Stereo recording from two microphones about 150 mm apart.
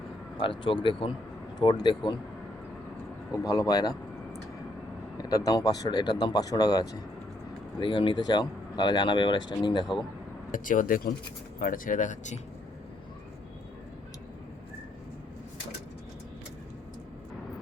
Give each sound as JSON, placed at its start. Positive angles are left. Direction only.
{"t": 0.3, "sound": "speech", "side_deg": 35}
{"t": 3.3, "sound": "speech", "side_deg": 25}
{"t": 5.1, "sound": "speech", "side_deg": 25}
{"t": 10.5, "sound": "speech", "side_deg": 60}